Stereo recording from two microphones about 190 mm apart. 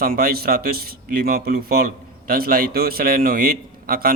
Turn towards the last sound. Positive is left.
turn(degrees=-50)  # may be behind; listen again after turning